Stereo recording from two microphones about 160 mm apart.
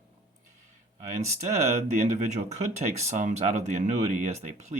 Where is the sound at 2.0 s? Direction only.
45° right (ahead or behind).